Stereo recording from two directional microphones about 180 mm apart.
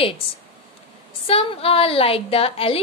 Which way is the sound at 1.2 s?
30° left (ahead or behind).